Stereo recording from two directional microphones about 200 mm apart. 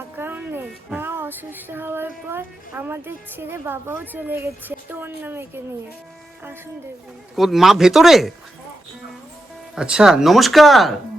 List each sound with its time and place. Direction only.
0.2 s a sound: 10° right (ahead or behind)
7.3 s speech: centre (ahead or behind)
9.7 s speech: 5° right (ahead or behind)